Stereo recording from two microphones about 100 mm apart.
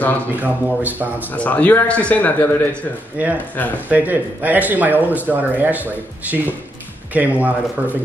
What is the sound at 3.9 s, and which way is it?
Speech, 15° right (ahead or behind).